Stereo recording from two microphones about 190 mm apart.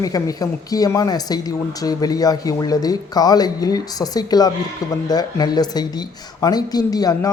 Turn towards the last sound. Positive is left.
turn(degrees=20)  # may be behind; listen again after turning